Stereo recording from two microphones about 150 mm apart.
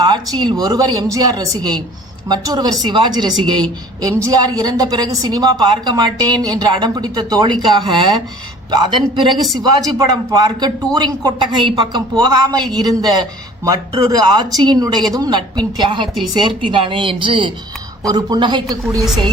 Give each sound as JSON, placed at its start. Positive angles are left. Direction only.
{"t": 0.0, "sound": "a woman's voice", "side_deg": -30}